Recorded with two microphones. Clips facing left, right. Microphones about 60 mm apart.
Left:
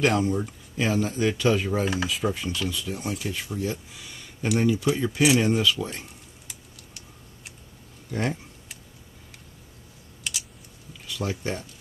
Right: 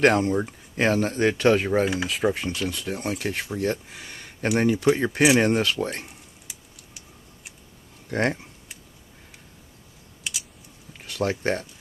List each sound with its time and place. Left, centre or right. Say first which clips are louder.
0.1 s speech: right 2 dB; right
6.5 s typing: left 1 dB; centre
8.1 s speech: right 4 dB; right
10.3 s typing: even; centre
11.1 s speech: right 5 dB; right